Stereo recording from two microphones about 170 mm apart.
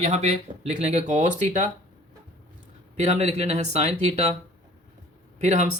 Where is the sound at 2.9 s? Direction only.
40° right (ahead or behind).